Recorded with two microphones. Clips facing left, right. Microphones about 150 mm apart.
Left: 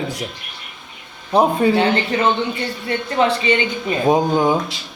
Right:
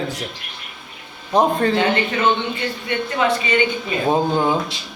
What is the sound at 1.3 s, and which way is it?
Speech, 10° left (ahead or behind).